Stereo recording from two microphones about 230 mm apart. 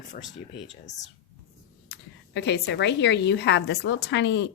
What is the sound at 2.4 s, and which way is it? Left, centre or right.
A woman's voice, left.